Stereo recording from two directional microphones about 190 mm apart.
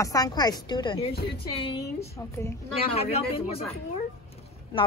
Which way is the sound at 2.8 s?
35° left (ahead or behind).